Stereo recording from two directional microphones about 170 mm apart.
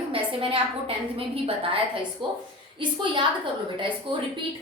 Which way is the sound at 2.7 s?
30° right (ahead or behind).